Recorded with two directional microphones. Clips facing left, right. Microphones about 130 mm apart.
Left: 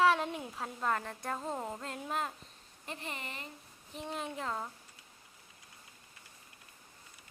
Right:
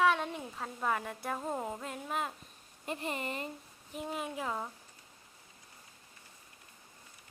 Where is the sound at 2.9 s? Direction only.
40° right (ahead or behind).